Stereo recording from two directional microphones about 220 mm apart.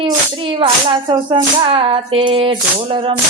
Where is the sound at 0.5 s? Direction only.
25° right (ahead or behind).